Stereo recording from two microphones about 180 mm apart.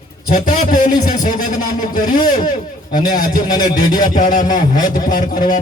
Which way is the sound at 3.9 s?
50° left (ahead or behind).